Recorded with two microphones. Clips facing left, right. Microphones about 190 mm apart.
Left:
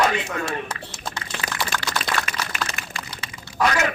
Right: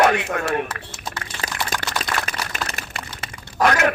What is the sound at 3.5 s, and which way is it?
Speech, 55° right (ahead or behind).